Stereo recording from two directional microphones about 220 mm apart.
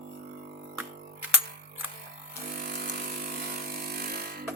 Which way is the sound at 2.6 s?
45° right (ahead or behind).